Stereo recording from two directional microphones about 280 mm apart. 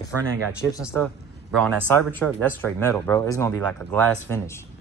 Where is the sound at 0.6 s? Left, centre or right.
Centre.